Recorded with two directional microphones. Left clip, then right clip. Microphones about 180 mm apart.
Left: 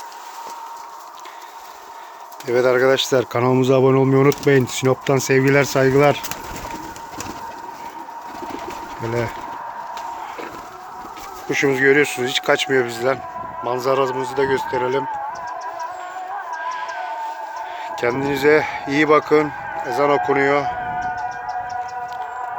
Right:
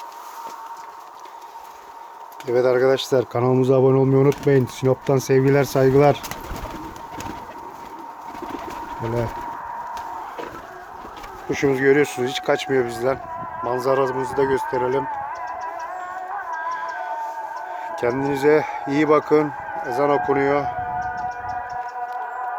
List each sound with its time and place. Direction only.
2.5 s speech: centre (ahead or behind)
11.4 s speech: 5° right (ahead or behind)
17.7 s speech: 5° right (ahead or behind)